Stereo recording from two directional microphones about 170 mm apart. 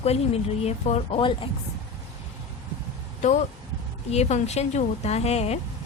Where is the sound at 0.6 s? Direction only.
35° left (ahead or behind).